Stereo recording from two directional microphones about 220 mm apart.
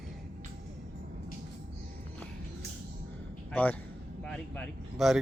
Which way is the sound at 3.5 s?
5° left (ahead or behind).